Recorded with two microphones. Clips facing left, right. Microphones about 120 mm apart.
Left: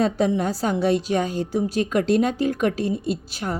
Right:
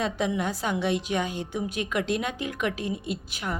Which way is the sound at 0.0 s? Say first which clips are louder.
Left 6 dB; 35° left (ahead or behind).